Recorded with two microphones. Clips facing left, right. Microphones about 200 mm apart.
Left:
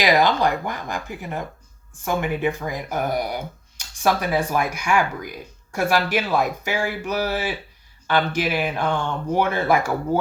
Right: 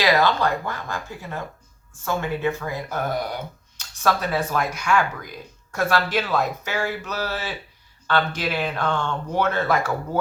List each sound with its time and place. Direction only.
0.0 s speech: 15° left (ahead or behind)